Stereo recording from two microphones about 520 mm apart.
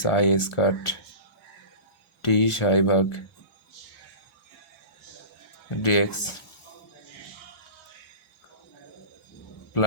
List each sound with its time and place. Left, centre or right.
0.0 s speech: left
2.2 s speech: left
5.8 s speech: left